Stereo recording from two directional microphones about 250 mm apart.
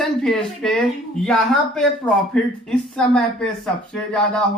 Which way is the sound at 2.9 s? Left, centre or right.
Centre.